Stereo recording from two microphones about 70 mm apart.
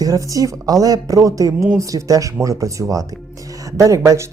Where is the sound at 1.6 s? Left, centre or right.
Right.